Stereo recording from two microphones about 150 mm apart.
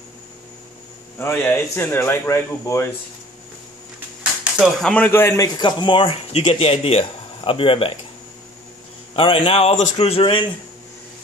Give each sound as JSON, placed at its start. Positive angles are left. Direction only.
{"t": 1.2, "sound": "a man's voice", "side_deg": 15}
{"t": 4.8, "sound": "a man's voice", "side_deg": 10}
{"t": 5.6, "sound": "speech", "side_deg": 30}
{"t": 9.1, "sound": "speech", "side_deg": 35}